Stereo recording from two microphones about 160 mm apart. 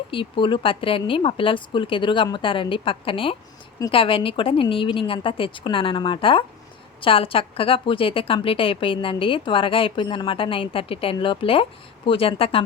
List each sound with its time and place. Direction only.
0.1 s a woman's voice: 30° left (ahead or behind)